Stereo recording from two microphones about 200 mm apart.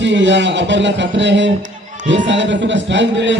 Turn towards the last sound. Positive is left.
turn(degrees=-65)  # may be behind; listen again after turning